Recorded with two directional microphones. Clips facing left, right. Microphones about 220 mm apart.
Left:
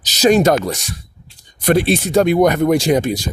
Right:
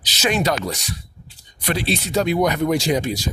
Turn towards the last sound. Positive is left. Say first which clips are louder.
# left 5 dB
turn(degrees=55)  # may be behind; listen again after turning